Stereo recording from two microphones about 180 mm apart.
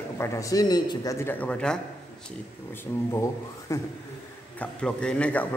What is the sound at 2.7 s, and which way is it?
Speech, 15° left (ahead or behind).